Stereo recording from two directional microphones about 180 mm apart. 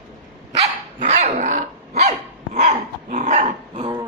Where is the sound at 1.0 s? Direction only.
35° right (ahead or behind).